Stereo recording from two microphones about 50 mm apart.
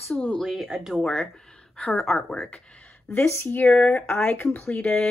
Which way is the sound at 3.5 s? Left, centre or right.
Left.